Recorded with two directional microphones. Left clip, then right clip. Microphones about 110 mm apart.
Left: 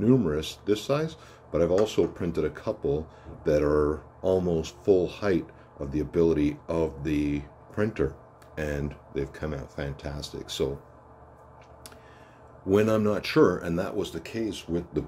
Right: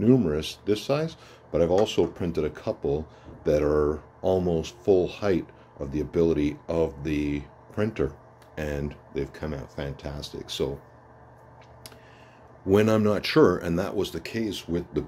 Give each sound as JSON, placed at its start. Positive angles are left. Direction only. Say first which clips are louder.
{"t": 0.0, "sound": "speech", "louder": "right 2 dB", "side_deg": -30}
{"t": 12.6, "sound": "speech", "louder": "right 2 dB", "side_deg": -45}